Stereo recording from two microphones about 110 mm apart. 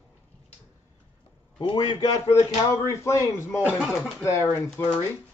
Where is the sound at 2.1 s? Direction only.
25° left (ahead or behind).